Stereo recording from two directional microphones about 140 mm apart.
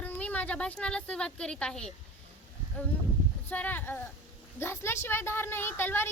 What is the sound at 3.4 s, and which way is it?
Speech, 10° left (ahead or behind).